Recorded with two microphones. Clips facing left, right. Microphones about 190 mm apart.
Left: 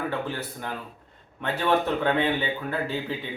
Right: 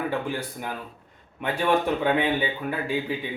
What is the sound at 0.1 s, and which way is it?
Speech, 10° right (ahead or behind).